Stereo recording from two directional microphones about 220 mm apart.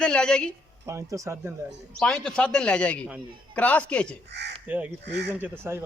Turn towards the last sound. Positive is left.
turn(degrees=-10)  # may be behind; listen again after turning